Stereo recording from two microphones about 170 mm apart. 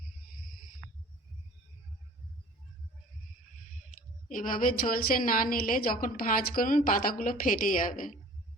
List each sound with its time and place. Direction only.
4.3 s a woman's voice: 50° left (ahead or behind)